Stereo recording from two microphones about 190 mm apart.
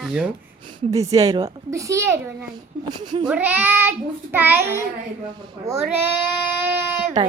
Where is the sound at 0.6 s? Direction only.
20° right (ahead or behind).